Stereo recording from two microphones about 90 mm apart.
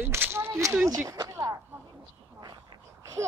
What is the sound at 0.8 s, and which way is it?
Speech, 35° right (ahead or behind).